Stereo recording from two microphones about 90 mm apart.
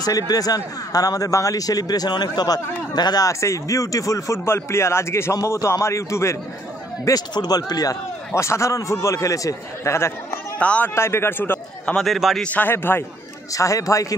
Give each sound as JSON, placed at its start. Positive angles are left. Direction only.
{"t": 0.0, "sound": "speech", "side_deg": 45}
{"t": 7.1, "sound": "speech", "side_deg": 45}
{"t": 8.4, "sound": "speech", "side_deg": 35}
{"t": 10.6, "sound": "a man's voice", "side_deg": 15}
{"t": 11.0, "sound": "a man's voice", "side_deg": 30}
{"t": 11.8, "sound": "a man's voice", "side_deg": 10}
{"t": 12.1, "sound": "a man's voice", "side_deg": 0}
{"t": 12.5, "sound": "a man's voice", "side_deg": 25}
{"t": 13.5, "sound": "speech", "side_deg": 40}